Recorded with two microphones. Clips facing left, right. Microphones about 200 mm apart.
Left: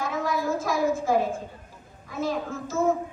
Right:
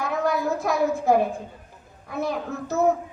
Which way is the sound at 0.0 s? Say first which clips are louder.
Right 3 dB; 65° right (ahead or behind).